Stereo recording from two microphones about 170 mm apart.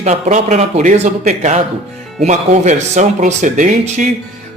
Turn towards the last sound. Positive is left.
turn(degrees=-45)  # may be behind; listen again after turning